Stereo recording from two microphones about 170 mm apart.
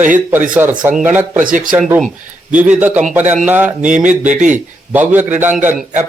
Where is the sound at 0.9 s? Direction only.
10° right (ahead or behind).